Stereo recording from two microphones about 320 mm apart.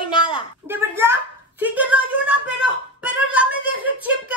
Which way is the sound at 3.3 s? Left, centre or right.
Centre.